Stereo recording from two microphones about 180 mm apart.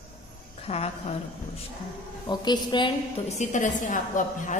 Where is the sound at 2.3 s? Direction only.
25° left (ahead or behind).